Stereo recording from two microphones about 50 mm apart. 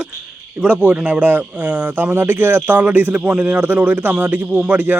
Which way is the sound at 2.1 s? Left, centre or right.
Right.